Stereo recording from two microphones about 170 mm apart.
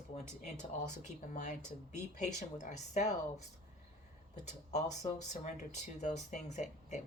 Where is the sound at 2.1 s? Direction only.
45° left (ahead or behind).